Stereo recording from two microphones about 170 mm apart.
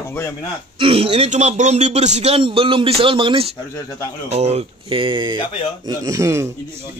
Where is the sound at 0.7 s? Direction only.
35° right (ahead or behind).